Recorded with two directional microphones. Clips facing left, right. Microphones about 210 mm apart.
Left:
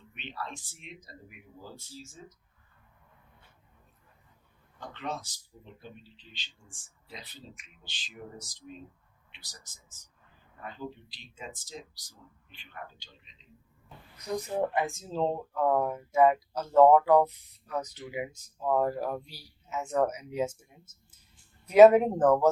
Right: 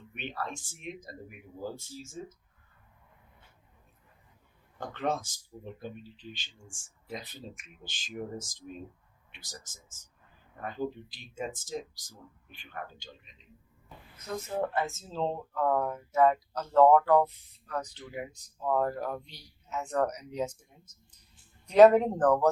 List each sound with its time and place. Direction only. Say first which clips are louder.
0.1 s speech: right 3 dB; 50° right (ahead or behind)
4.8 s speech: right 6 dB; 50° right (ahead or behind)
14.2 s speech: left 2 dB; 15° left (ahead or behind)